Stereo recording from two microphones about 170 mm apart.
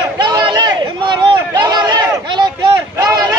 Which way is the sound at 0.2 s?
25° right (ahead or behind).